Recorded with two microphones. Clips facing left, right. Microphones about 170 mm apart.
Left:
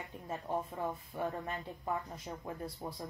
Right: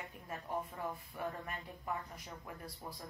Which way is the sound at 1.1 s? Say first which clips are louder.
Left 5 dB; 30° left (ahead or behind).